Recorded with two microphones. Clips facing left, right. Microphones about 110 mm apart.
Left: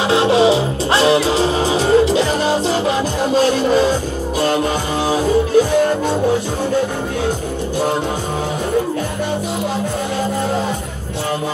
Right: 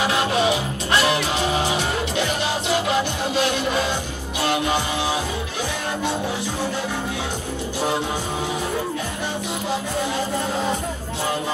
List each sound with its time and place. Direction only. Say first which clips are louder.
0.0 s music: left 7 dB; 30° left (ahead or behind)